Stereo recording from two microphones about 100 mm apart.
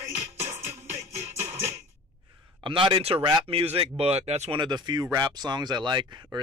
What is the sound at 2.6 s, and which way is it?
Speech, 60° right (ahead or behind).